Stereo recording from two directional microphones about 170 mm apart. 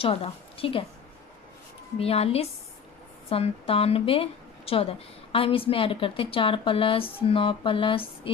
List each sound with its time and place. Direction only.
0.0 s a woman's voice: 35° left (ahead or behind)
2.0 s a woman's voice: 35° left (ahead or behind)